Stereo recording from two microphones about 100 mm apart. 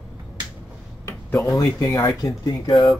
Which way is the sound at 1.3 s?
35° left (ahead or behind).